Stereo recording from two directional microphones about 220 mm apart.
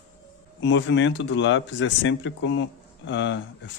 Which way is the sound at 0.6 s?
55° left (ahead or behind).